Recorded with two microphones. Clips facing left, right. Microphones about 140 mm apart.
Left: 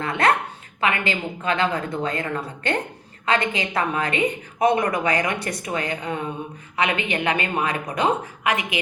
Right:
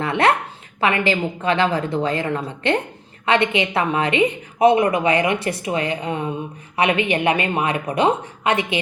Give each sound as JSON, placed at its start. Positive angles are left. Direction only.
{"t": 0.0, "sound": "a woman's voice", "side_deg": -30}